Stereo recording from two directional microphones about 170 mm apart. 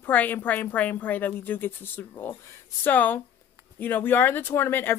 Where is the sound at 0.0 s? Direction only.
10° left (ahead or behind).